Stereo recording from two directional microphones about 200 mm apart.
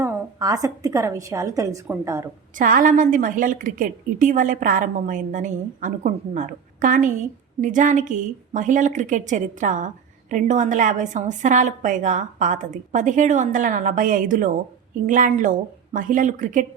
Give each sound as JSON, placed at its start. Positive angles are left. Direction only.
{"t": 0.0, "sound": "a woman's voice", "side_deg": -15}
{"t": 2.6, "sound": "a woman's voice", "side_deg": -40}